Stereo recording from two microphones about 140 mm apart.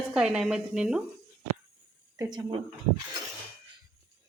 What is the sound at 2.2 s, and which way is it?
Speech, 30° right (ahead or behind).